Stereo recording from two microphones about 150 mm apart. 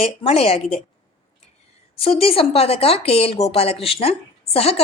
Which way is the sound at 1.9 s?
40° left (ahead or behind).